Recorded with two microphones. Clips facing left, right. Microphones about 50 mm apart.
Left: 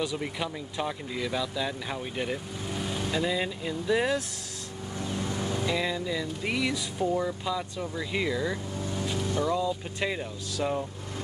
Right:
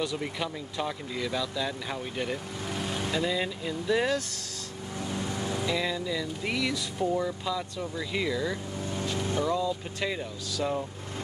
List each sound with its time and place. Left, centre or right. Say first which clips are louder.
0.0 s speech: even; centre
5.0 s vehicle: left 1 dB; right
5.7 s speech: even; centre